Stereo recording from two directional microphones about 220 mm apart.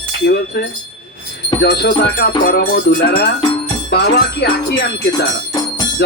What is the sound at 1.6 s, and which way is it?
Speech, 45° left (ahead or behind).